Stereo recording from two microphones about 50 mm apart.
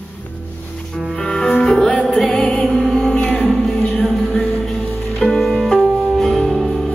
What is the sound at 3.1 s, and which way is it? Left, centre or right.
Music, left.